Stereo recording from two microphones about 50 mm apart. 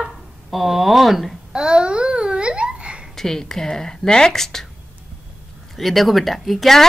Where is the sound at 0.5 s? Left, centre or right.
Centre.